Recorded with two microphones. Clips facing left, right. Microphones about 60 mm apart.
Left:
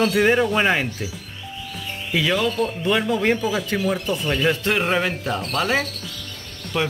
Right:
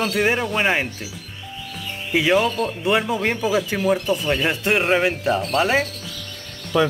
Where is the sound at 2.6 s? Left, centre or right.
Centre.